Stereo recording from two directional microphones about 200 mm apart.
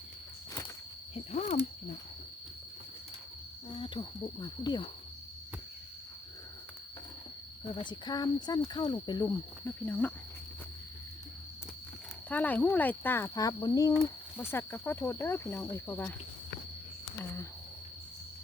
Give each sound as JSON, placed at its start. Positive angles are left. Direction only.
{"t": 1.1, "sound": "speech", "side_deg": 35}
{"t": 3.7, "sound": "speech", "side_deg": 25}
{"t": 7.8, "sound": "speech", "side_deg": 20}
{"t": 12.3, "sound": "speech", "side_deg": 10}